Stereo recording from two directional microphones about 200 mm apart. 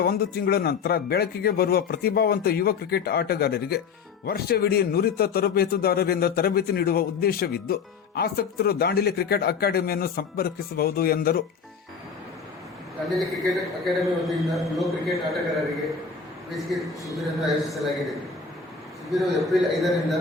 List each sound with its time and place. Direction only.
0.0 s speech: 50° left (ahead or behind)
13.1 s a man's voice: centre (ahead or behind)
16.7 s a man's voice: centre (ahead or behind)
19.1 s a man's voice: centre (ahead or behind)